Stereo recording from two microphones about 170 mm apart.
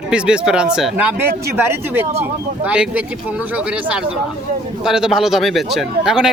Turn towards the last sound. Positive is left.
turn(degrees=-5)  # may be behind; listen again after turning